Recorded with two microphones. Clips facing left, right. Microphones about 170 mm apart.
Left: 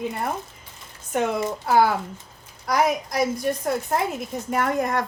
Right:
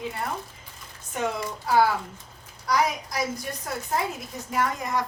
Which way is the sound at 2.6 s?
55° left (ahead or behind).